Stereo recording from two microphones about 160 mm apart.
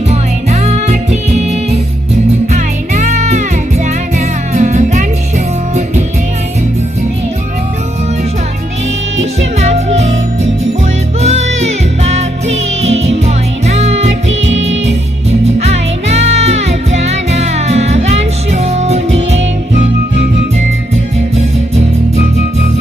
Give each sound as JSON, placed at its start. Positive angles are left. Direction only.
{"t": 0.1, "sound": "music", "side_deg": -45}
{"t": 4.5, "sound": "music", "side_deg": -50}
{"t": 11.2, "sound": "music", "side_deg": -40}
{"t": 15.3, "sound": "music", "side_deg": -40}